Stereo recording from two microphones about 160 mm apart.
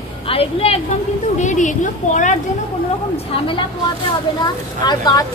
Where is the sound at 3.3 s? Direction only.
35° left (ahead or behind).